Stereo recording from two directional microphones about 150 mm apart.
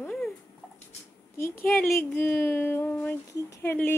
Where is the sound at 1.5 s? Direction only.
15° left (ahead or behind).